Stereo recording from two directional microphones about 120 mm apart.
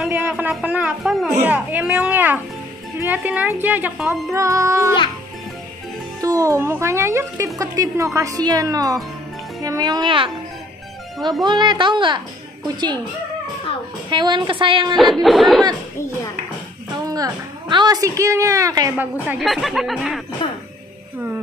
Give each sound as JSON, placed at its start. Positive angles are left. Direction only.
{"t": 0.1, "sound": "speech", "side_deg": -15}
{"t": 1.0, "sound": "speech", "side_deg": 0}
{"t": 1.4, "sound": "speech", "side_deg": -15}
{"t": 4.1, "sound": "a woman's voice", "side_deg": -25}
{"t": 6.2, "sound": "a woman's voice", "side_deg": -30}
{"t": 11.4, "sound": "a woman's voice", "side_deg": -40}
{"t": 14.1, "sound": "a woman's voice", "side_deg": -40}
{"t": 15.0, "sound": "speech", "side_deg": 0}
{"t": 17.0, "sound": "a woman's voice", "side_deg": -30}
{"t": 19.4, "sound": "speech", "side_deg": 0}